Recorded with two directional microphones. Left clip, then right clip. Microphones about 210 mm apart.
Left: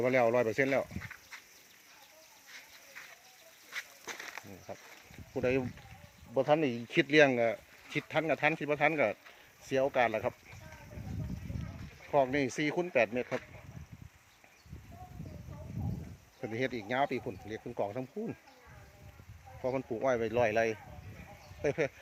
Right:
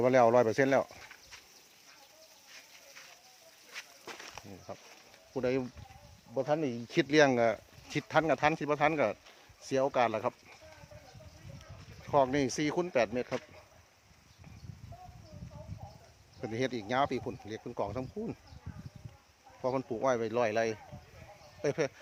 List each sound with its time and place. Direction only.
0.0 s speech: 15° right (ahead or behind)
3.7 s a sound: 25° left (ahead or behind)
5.3 s speech: 5° right (ahead or behind)
6.3 s speech: 10° left (ahead or behind); by 10.3 s 10° right (ahead or behind)
12.1 s speech: 15° right (ahead or behind)
16.6 s speech: 15° right (ahead or behind)
19.6 s speech: 10° right (ahead or behind)